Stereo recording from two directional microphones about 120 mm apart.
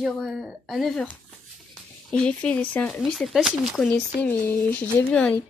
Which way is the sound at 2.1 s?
10° left (ahead or behind).